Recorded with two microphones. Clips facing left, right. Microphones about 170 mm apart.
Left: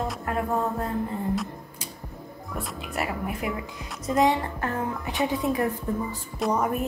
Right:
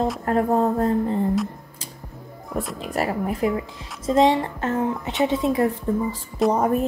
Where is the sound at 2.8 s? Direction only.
35° right (ahead or behind).